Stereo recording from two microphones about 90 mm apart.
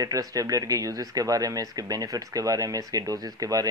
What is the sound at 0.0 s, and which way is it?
Speech, 40° right (ahead or behind).